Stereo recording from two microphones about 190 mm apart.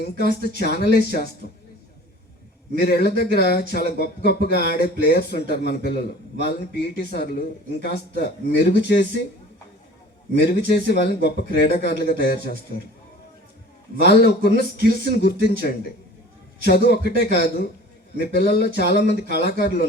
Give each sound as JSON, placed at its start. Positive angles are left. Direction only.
{"t": 0.0, "sound": "speech", "side_deg": 60}
{"t": 2.8, "sound": "speech", "side_deg": 60}
{"t": 10.3, "sound": "speech", "side_deg": 60}
{"t": 14.0, "sound": "speech", "side_deg": 60}
{"t": 16.6, "sound": "speech", "side_deg": 60}